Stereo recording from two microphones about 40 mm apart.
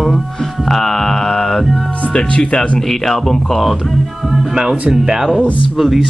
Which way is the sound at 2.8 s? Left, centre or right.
Centre.